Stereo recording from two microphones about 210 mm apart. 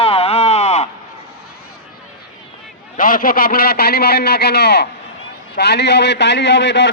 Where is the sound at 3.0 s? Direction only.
40° left (ahead or behind).